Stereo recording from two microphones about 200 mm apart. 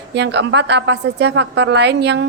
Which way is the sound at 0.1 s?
60° right (ahead or behind).